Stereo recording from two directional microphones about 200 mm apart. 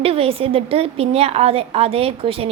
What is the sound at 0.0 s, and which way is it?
A woman's voice, 30° right (ahead or behind).